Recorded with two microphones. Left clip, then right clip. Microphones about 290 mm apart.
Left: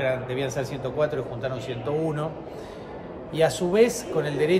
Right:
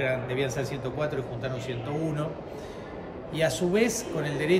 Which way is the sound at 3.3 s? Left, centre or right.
Centre.